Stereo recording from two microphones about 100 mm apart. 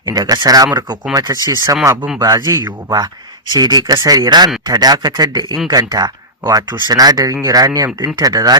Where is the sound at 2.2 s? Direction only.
40° right (ahead or behind).